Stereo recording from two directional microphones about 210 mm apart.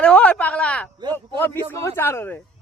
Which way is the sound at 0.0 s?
5° left (ahead or behind).